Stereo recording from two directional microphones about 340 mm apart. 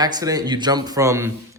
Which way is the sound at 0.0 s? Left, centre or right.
Centre.